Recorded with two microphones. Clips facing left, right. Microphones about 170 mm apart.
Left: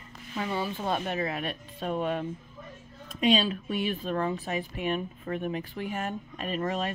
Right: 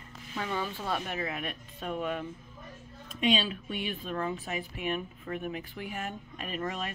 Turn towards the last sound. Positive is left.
turn(degrees=35)  # may be behind; listen again after turning